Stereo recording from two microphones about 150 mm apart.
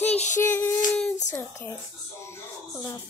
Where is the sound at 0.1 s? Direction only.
50° left (ahead or behind).